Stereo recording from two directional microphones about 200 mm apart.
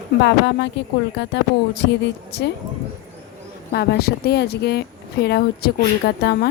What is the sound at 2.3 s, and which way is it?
Speech, 60° left (ahead or behind).